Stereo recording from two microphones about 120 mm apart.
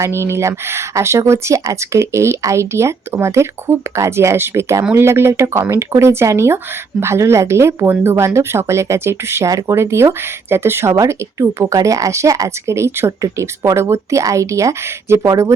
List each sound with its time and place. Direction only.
0.0 s speech: 20° right (ahead or behind)